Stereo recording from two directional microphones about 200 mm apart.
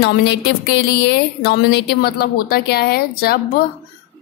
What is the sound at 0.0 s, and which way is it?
A woman's voice, 60° left (ahead or behind).